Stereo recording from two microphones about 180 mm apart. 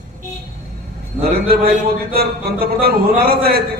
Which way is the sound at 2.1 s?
55° right (ahead or behind).